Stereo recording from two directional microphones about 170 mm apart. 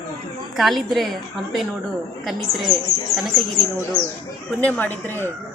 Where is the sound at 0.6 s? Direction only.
Centre (ahead or behind).